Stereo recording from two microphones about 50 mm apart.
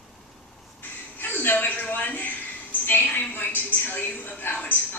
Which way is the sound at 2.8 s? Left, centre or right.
Left.